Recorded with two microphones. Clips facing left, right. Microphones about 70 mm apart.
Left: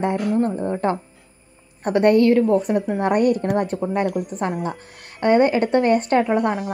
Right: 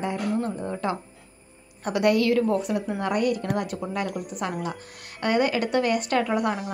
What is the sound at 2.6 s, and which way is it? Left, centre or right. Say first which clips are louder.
Speech: left 6 dB; left.